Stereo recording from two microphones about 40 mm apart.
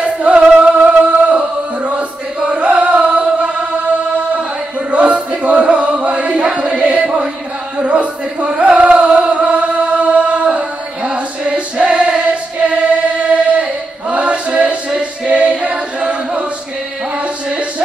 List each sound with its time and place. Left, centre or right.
0.0 s singing: right
0.7 s music: right
2.5 s carnatic music: right
4.9 s music: right
7.7 s a sound: right
8.5 s chant: right